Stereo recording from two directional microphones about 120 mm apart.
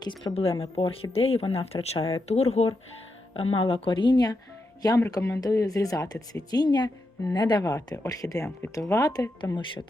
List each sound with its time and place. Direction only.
0.3 s speech: 30° left (ahead or behind)
0.6 s speech: 50° left (ahead or behind)
3.3 s speech: 50° left (ahead or behind)